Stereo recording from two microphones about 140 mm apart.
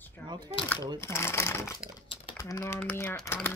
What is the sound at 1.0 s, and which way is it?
Speech, 20° left (ahead or behind).